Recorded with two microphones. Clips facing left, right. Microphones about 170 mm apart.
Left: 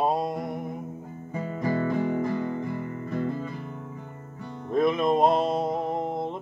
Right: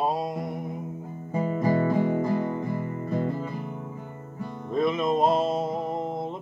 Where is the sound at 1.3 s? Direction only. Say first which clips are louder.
Right 4 dB; 25° right (ahead or behind).